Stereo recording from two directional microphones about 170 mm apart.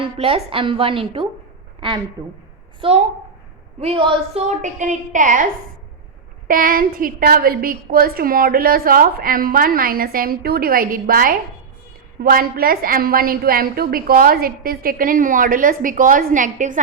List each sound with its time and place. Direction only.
0.0 s a woman's voice: 35° right (ahead or behind)
2.8 s a woman's voice: 30° right (ahead or behind); by 5.5 s 50° right (ahead or behind)
6.5 s a woman's voice: 55° right (ahead or behind)